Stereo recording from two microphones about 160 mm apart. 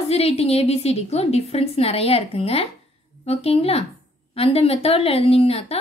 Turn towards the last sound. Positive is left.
turn(degrees=35)  # may be behind; listen again after turning